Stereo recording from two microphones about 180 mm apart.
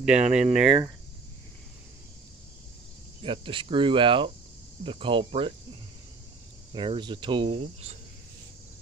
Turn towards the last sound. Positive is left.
turn(degrees=-35)  # may be behind; listen again after turning